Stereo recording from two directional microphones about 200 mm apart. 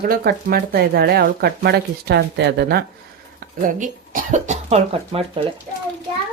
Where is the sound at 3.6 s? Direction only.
40° right (ahead or behind).